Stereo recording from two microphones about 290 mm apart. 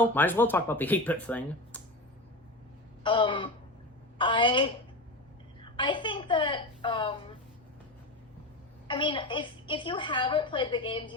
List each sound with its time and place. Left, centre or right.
0.0 s speech: centre
3.0 s a woman's voice: centre
5.7 s a woman's voice: centre
8.9 s a woman's voice: centre